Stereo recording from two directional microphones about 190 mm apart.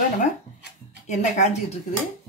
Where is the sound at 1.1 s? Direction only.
40° left (ahead or behind).